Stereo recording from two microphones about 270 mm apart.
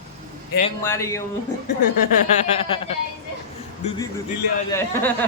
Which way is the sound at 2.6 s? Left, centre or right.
Centre.